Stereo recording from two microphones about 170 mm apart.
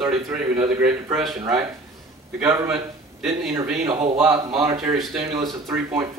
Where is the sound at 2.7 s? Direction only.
5° right (ahead or behind).